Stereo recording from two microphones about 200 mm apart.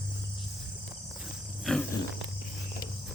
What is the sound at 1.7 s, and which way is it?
Wild animals, centre (ahead or behind).